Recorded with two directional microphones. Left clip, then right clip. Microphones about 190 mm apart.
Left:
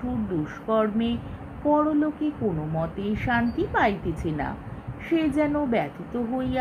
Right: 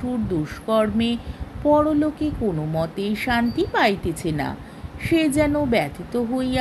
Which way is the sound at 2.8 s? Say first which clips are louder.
Right 5 dB; 65° right (ahead or behind).